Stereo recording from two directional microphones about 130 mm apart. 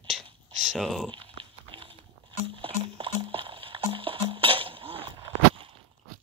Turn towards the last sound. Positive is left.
turn(degrees=-45)  # may be behind; listen again after turning